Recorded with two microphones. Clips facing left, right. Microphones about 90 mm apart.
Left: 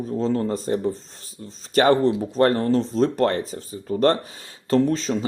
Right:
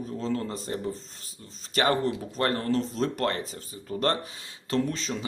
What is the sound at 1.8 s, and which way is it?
Speech, 35° left (ahead or behind).